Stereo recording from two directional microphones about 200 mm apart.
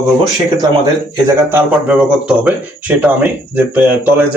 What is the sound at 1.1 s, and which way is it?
Speech, 10° right (ahead or behind).